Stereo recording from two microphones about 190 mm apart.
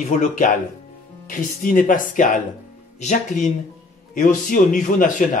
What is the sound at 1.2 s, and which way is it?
A man's voice, 45° left (ahead or behind).